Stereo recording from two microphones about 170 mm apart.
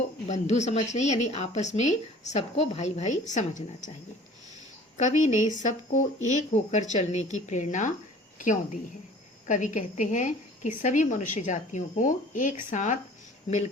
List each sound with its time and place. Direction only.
0.3 s a woman's voice: 40° left (ahead or behind)
4.9 s a woman's voice: 45° left (ahead or behind)